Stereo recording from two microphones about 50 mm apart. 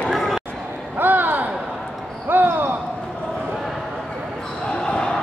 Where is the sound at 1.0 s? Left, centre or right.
Right.